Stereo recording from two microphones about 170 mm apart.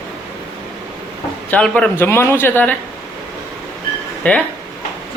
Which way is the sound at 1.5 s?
5° left (ahead or behind).